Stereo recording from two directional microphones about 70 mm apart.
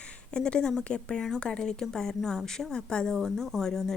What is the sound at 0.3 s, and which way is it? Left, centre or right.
Speech, centre.